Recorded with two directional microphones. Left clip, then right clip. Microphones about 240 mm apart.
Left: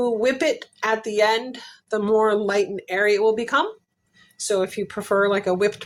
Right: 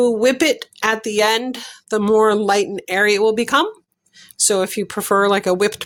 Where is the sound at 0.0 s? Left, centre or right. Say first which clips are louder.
Right 5 dB; right.